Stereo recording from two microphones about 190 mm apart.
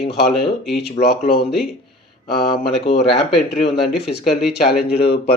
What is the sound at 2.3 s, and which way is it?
Speech, 55° left (ahead or behind).